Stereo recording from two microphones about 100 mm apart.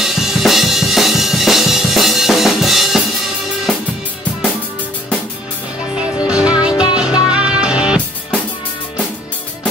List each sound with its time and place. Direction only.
0.0 s drum: 5° right (ahead or behind)
6.2 s music: 10° right (ahead or behind)
6.7 s music: 45° left (ahead or behind)
7.2 s music: 10° right (ahead or behind)